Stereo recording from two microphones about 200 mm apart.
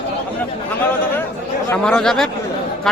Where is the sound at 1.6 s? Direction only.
5° left (ahead or behind).